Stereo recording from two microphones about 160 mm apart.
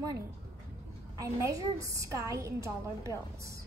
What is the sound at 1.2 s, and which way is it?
A woman's voice, 20° right (ahead or behind).